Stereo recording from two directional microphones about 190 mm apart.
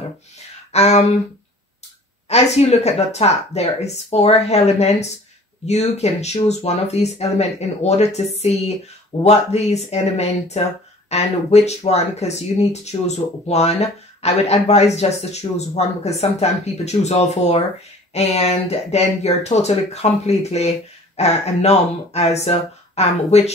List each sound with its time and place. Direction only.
0.7 s speech: 35° left (ahead or behind)
2.2 s speech: 35° left (ahead or behind)